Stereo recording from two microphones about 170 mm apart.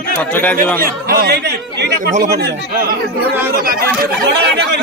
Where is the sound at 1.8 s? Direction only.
80° right; by 4.1 s 60° right (ahead or behind).